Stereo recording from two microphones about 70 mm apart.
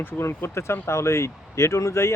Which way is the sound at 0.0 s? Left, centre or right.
Left.